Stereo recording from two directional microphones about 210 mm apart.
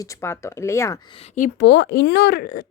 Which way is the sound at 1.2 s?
40° left (ahead or behind).